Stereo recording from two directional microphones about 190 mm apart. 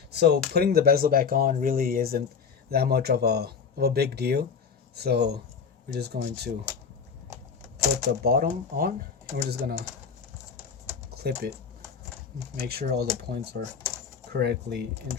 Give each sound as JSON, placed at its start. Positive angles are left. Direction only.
{"t": 0.1, "sound": "speech", "side_deg": -60}
{"t": 8.2, "sound": "speech", "side_deg": -50}
{"t": 11.1, "sound": "speech", "side_deg": -55}
{"t": 12.5, "sound": "speech", "side_deg": -55}